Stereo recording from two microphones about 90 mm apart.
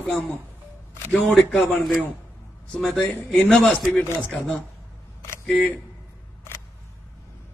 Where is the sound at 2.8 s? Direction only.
5° left (ahead or behind).